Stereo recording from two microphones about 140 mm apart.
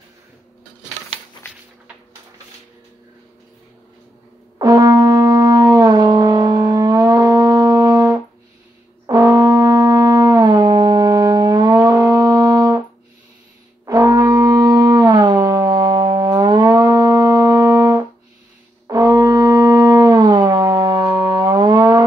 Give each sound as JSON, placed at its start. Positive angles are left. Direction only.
{"t": 4.6, "sound": "shofar", "side_deg": -25}
{"t": 9.0, "sound": "brass instrument", "side_deg": -25}
{"t": 13.8, "sound": "shofar", "side_deg": -25}
{"t": 18.9, "sound": "music", "side_deg": -25}